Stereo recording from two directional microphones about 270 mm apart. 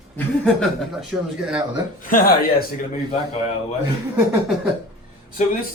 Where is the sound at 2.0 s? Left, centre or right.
Left.